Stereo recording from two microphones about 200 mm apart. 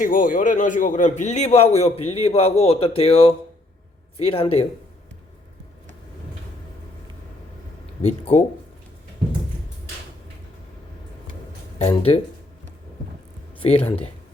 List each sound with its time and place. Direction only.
0.0 s a man's voice: 40° left (ahead or behind)
11.8 s speech: 30° left (ahead or behind)
13.6 s speech: 30° left (ahead or behind)